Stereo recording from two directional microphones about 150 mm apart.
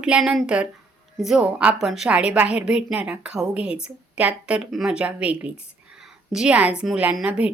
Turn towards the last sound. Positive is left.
turn(degrees=-10)  # may be behind; listen again after turning